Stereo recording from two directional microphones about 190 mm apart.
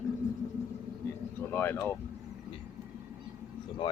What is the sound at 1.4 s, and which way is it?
Speech, 10° left (ahead or behind).